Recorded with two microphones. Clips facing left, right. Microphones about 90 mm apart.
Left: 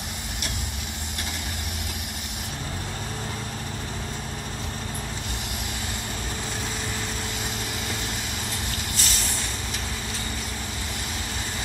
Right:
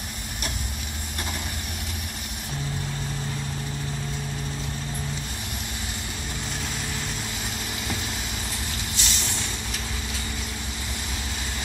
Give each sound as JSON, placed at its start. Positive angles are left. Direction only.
{"t": 8.9, "sound": "vehicle", "side_deg": 45}